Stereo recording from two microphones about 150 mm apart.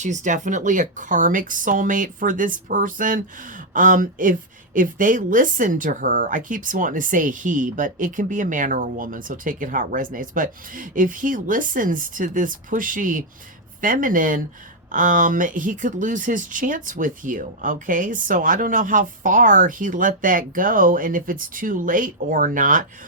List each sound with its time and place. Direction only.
0.0 s speech: 55° right (ahead or behind)